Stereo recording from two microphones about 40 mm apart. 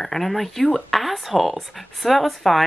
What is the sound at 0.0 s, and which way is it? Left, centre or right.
Speech, centre.